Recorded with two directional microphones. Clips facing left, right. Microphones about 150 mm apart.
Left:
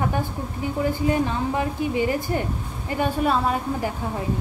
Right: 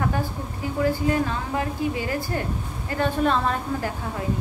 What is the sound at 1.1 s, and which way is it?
A woman's voice, 20° left (ahead or behind).